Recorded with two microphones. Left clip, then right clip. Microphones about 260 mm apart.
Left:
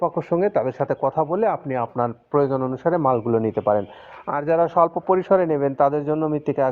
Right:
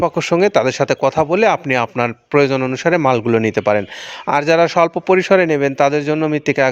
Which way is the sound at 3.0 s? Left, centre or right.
Right.